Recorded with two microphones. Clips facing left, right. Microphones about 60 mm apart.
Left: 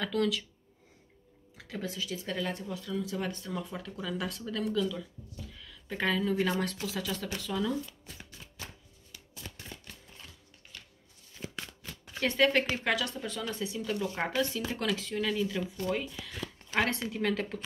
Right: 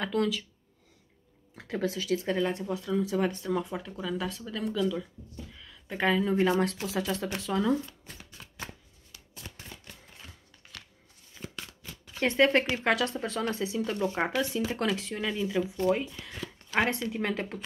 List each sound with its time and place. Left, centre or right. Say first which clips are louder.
0.0 s speech: right 1 dB; right
1.5 s speech: right 7 dB; right
2.2 s speech: right 6 dB; right
3.9 s speech: right 1 dB; centre
4.6 s speech: right 3 dB; centre
5.6 s a sound: right 3 dB; centre
6.8 s speech: right 4 dB; right
12.4 s speech: right 3 dB; right
13.1 s speech: right 5 dB; right
14.1 s speech: right 2 dB; centre
14.8 s speech: right 2 dB; right